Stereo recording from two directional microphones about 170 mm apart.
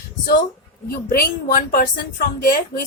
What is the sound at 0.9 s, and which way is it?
Speech, 60° left (ahead or behind).